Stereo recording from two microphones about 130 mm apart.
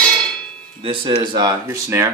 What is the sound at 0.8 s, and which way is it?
Speech, 45° right (ahead or behind).